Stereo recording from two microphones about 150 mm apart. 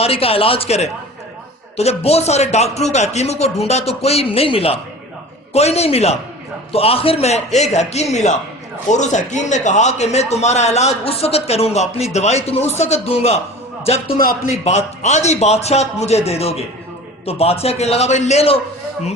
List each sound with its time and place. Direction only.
0.0 s a man's voice: 40° left (ahead or behind)